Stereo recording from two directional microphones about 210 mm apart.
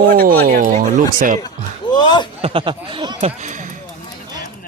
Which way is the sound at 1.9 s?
20° left (ahead or behind).